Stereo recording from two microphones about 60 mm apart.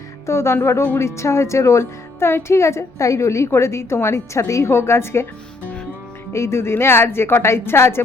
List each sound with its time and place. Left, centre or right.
0.3 s speech: left
6.3 s speech: left